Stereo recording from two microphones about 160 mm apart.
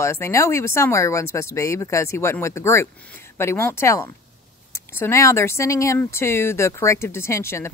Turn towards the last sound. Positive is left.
turn(degrees=15)  # may be behind; listen again after turning